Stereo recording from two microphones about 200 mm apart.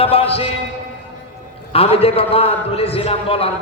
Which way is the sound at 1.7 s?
30° left (ahead or behind).